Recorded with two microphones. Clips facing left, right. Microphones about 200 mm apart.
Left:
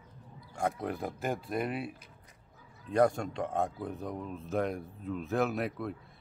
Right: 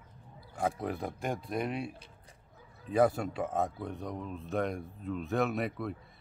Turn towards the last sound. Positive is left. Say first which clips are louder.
# even
turn(degrees=0)  # may be behind; listen again after turning